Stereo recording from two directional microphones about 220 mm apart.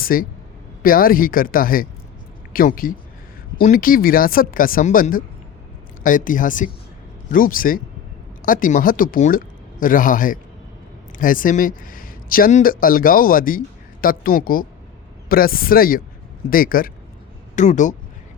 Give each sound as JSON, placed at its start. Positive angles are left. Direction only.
{"t": 0.0, "sound": "speech", "side_deg": 40}